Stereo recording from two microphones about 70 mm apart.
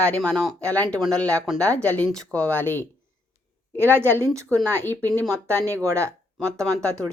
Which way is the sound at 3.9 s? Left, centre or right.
Right.